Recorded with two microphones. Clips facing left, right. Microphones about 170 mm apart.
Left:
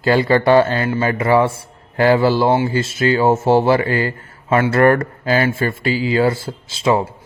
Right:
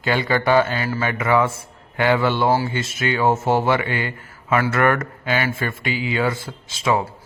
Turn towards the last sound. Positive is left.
turn(degrees=30)  # may be behind; listen again after turning